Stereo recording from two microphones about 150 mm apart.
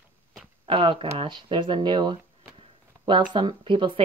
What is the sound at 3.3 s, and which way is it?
Speech, 35° right (ahead or behind).